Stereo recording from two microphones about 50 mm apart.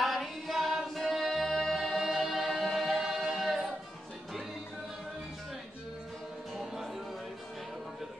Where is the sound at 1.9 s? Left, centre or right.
Centre.